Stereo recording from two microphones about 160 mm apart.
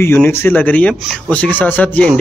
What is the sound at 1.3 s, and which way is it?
Speech, 10° left (ahead or behind).